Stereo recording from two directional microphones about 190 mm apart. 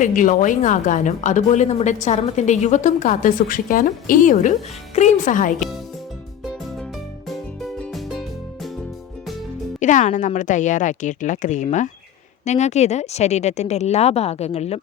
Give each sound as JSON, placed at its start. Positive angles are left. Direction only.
{"t": 0.0, "sound": "a woman's voice", "side_deg": 45}
{"t": 5.5, "sound": "speech", "side_deg": 0}
{"t": 7.3, "sound": "music", "side_deg": 0}
{"t": 9.8, "sound": "a woman's voice", "side_deg": 40}